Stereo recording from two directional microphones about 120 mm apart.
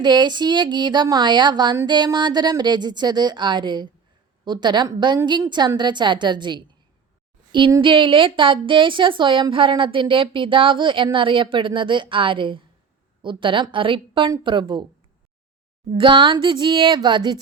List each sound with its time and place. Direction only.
0.0 s a woman's voice: 40° right (ahead or behind)
7.8 s a woman's voice: 45° right (ahead or behind)
16.0 s a woman's voice: 45° right (ahead or behind)